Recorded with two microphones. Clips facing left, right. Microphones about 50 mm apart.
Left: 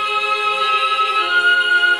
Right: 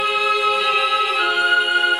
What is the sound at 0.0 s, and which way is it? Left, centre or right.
Music, centre.